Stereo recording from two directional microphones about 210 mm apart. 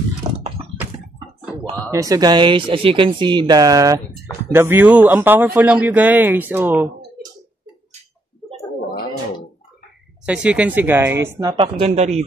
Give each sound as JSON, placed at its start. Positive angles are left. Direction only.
{"t": 0.3, "sound": "a sound", "side_deg": -20}
{"t": 1.9, "sound": "speech", "side_deg": -15}
{"t": 10.2, "sound": "speech", "side_deg": -5}
{"t": 11.3, "sound": "speech", "side_deg": -20}